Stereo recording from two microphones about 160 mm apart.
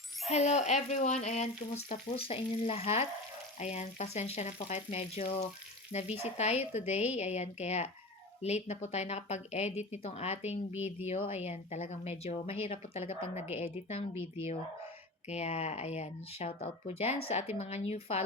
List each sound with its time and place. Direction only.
0.3 s speech: 45° left (ahead or behind)
15.3 s speech: 40° left (ahead or behind)